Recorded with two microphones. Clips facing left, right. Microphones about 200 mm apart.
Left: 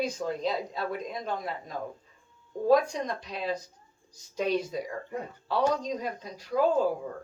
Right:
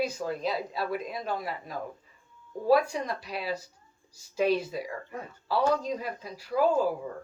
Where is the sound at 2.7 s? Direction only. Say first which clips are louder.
Even; 5° right (ahead or behind).